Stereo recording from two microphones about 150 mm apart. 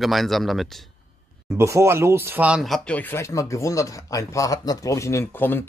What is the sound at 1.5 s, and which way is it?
Speech, 20° right (ahead or behind).